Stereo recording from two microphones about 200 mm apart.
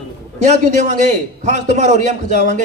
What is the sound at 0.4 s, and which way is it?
A man's voice, 35° right (ahead or behind).